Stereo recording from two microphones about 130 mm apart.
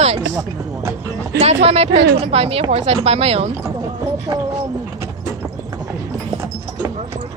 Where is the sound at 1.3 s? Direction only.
55° right (ahead or behind).